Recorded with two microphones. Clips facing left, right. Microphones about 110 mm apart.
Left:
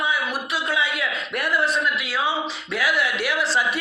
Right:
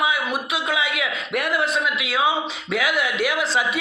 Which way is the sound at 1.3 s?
65° right (ahead or behind).